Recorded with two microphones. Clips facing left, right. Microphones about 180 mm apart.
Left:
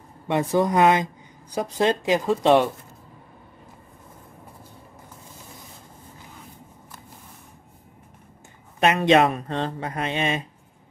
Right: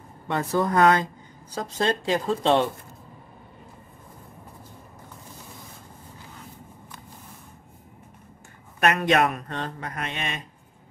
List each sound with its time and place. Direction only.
0.3 s speech: 15° left (ahead or behind)
8.7 s speech: 25° left (ahead or behind)